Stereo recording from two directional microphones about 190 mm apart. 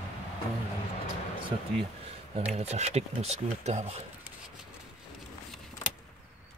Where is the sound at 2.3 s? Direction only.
35° right (ahead or behind).